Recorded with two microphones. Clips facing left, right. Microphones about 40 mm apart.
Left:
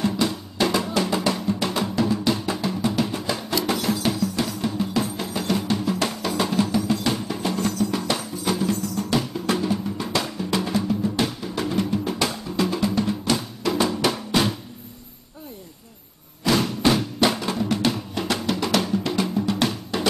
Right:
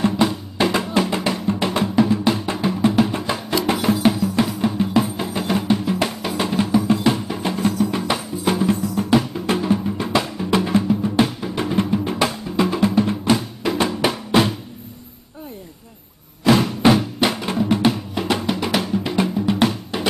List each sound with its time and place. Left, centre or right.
0.0 s drum: right
1.0 s music: right
16.4 s a sound: centre
16.9 s music: centre